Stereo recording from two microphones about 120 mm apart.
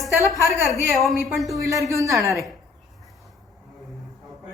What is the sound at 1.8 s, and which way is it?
Speech, 25° right (ahead or behind).